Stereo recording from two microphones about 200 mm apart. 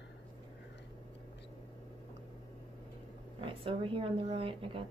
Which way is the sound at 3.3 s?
25° right (ahead or behind).